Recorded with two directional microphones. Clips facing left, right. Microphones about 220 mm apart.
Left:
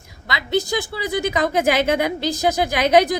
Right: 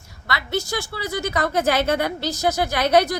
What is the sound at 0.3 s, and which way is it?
A woman's voice, 15° left (ahead or behind).